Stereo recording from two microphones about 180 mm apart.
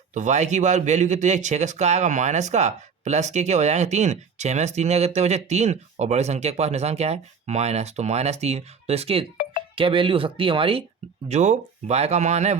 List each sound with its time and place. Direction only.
0.1 s speech: 40° right (ahead or behind)